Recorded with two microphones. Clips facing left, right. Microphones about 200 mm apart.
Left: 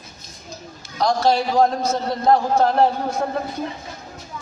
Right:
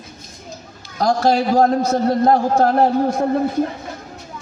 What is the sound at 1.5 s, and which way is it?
A man's voice, 50° right (ahead or behind).